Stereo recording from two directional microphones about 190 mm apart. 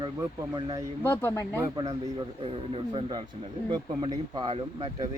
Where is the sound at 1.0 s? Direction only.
10° left (ahead or behind).